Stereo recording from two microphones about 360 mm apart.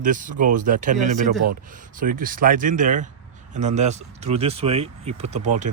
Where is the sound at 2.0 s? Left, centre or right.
Right.